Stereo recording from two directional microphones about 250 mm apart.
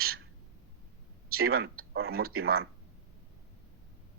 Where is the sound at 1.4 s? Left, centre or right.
Right.